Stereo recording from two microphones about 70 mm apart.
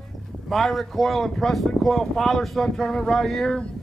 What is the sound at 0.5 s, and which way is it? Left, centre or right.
Speech, centre.